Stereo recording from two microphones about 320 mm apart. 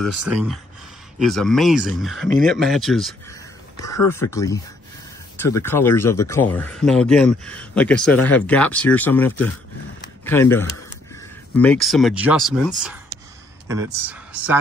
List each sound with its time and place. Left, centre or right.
0.2 s speech: centre